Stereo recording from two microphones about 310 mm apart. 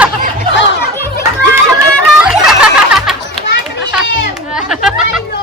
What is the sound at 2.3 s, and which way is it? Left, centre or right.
Music, centre.